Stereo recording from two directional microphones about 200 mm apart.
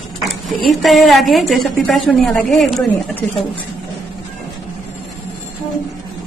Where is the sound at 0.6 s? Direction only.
Centre (ahead or behind).